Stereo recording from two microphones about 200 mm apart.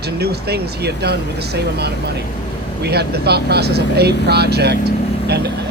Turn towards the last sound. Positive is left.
turn(degrees=-55)  # may be behind; listen again after turning